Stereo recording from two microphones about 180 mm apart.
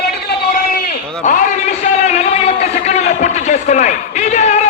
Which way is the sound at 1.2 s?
45° left (ahead or behind).